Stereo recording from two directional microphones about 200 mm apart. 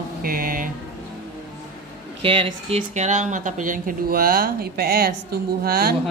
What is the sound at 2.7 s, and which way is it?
Speech, 35° right (ahead or behind).